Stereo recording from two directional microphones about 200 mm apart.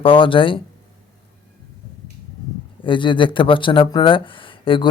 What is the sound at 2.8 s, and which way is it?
Speech, 25° left (ahead or behind).